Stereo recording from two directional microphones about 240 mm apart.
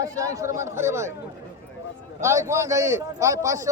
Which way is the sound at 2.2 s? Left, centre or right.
Centre.